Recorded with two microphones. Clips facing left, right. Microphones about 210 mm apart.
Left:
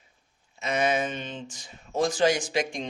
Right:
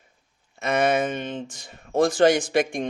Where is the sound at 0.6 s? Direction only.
55° right (ahead or behind).